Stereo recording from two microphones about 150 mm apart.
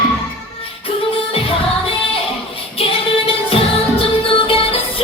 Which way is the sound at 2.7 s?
40° left (ahead or behind).